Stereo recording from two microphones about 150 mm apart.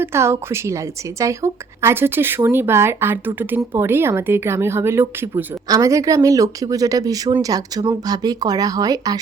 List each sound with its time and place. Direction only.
0.0 s a woman's voice: 15° right (ahead or behind)